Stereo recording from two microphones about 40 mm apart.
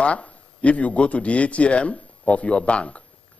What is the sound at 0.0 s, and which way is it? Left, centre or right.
A man's voice, left.